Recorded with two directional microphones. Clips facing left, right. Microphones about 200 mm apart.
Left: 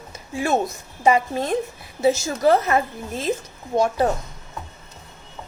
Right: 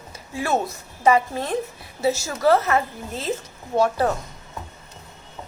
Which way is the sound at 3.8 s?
15° left (ahead or behind).